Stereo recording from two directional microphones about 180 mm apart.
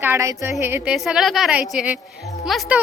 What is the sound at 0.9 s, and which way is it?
Speech, centre (ahead or behind).